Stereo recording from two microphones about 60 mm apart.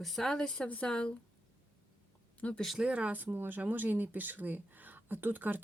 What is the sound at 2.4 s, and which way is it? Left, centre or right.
Speech, left.